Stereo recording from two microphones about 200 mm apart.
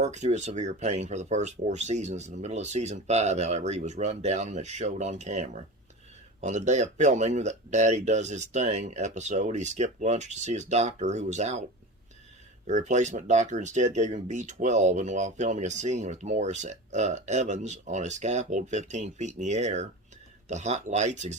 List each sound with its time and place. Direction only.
0.0 s speech: 35° right (ahead or behind)
12.6 s speech: 35° right (ahead or behind)